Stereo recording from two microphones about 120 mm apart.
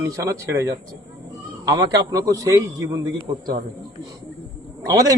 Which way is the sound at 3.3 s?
40° right (ahead or behind).